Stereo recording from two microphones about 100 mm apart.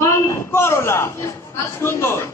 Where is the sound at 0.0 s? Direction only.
25° left (ahead or behind).